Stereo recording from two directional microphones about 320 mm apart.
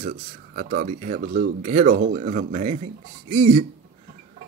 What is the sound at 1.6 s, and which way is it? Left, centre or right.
Speech, right.